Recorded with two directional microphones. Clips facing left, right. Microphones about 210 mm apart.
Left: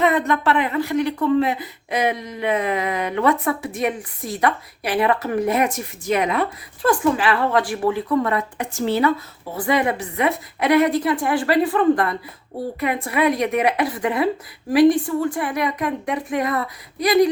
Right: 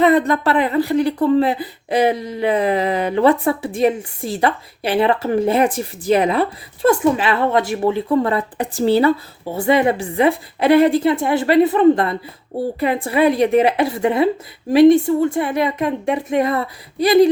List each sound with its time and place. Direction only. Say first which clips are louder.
0.0 s speech: right 4 dB; 35° right (ahead or behind)